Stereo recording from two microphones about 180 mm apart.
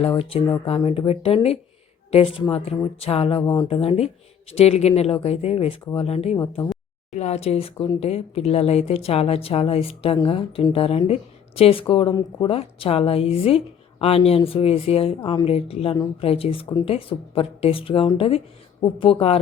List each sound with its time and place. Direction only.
0.0 s a woman's voice: 30° left (ahead or behind)
3.4 s speech: 15° left (ahead or behind)
3.7 s a woman's voice: 35° left (ahead or behind)
7.1 s a woman's voice: 35° left (ahead or behind)